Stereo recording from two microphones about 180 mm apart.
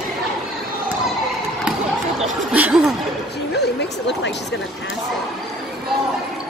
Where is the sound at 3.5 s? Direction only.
70° left (ahead or behind).